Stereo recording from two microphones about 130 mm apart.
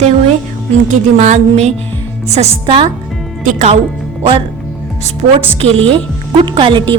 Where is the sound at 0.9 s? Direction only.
65° right (ahead or behind).